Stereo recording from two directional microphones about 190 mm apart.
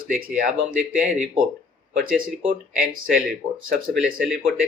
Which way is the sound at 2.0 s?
50° right (ahead or behind).